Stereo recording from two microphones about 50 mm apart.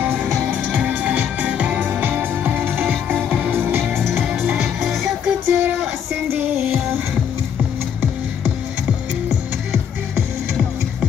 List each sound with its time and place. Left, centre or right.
0.0 s music: right
1.8 s music: right
3.3 s music: right
3.5 s music: right
4.7 s music: centre
5.5 s a sound: right